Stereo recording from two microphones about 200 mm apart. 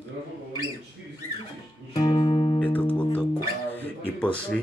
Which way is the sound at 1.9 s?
25° left (ahead or behind).